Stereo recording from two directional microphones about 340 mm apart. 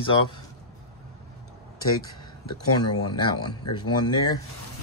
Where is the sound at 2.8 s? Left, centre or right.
Centre.